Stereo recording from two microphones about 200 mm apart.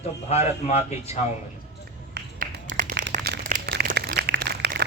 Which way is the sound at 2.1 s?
45° right (ahead or behind).